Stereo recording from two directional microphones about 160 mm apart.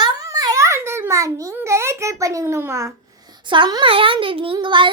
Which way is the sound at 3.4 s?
30° right (ahead or behind).